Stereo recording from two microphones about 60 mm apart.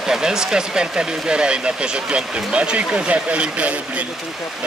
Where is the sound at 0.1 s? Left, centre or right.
Centre.